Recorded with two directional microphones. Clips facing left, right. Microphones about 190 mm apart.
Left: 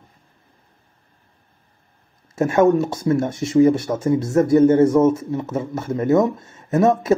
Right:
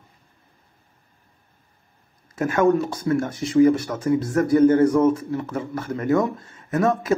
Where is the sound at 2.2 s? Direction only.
25° left (ahead or behind).